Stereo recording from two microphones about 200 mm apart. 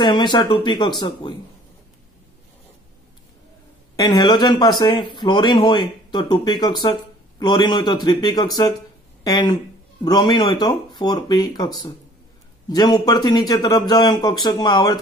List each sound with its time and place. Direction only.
0.0 s speech: 20° left (ahead or behind)
3.9 s speech: 20° left (ahead or behind)